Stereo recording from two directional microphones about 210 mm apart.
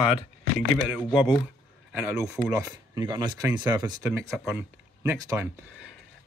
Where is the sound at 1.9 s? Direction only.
10° right (ahead or behind).